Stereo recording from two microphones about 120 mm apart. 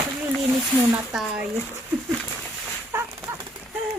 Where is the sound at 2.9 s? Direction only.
20° right (ahead or behind).